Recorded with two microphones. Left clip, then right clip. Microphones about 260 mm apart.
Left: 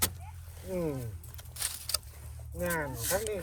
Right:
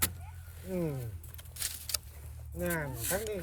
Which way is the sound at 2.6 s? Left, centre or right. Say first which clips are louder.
Left 2 dB; left.